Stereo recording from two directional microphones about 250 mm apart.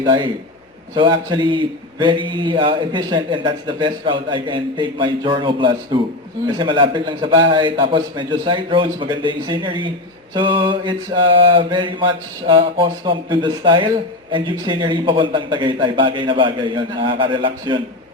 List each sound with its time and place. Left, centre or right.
0.0 s a man's voice: centre